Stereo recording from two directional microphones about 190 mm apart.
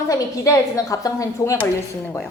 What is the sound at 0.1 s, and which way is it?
A woman's voice, 20° left (ahead or behind).